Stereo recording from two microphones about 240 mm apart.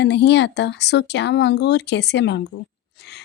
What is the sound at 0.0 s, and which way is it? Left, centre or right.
Speech, left.